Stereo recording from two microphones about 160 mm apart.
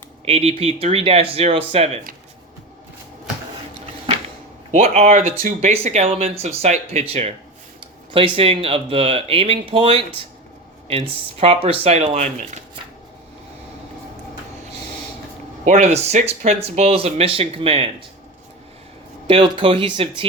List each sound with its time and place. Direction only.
0.3 s speech: 40° right (ahead or behind)
4.7 s speech: 45° right (ahead or behind)
15.6 s speech: 45° right (ahead or behind)
19.3 s speech: 35° right (ahead or behind)